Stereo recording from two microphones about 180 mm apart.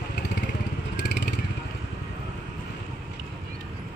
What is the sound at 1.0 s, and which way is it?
Vehicle, 75° left (ahead or behind).